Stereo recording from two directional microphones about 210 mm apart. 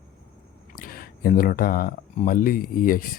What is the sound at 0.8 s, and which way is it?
Speech, 45° left (ahead or behind).